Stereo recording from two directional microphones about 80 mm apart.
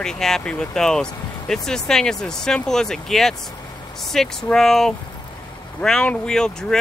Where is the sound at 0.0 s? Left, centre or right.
Centre.